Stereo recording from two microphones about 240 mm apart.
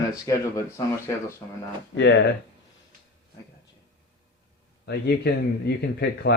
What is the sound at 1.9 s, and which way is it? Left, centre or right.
Speech, left.